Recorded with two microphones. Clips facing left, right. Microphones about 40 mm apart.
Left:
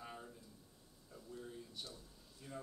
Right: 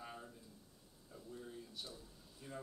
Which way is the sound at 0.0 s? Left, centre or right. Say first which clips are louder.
Even; centre.